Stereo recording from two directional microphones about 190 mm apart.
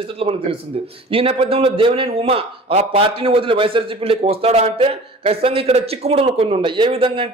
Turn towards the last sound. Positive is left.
turn(degrees=-30)  # may be behind; listen again after turning